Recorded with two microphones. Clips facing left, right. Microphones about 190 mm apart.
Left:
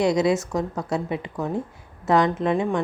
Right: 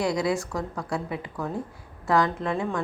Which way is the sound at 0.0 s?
20° left (ahead or behind).